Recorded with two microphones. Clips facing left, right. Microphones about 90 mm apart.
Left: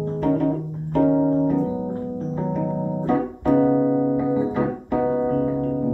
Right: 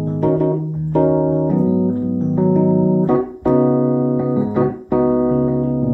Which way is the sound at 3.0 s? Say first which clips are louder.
Right 5 dB; 20° right (ahead or behind).